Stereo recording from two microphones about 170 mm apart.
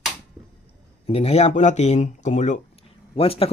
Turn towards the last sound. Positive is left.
turn(degrees=35)  # may be behind; listen again after turning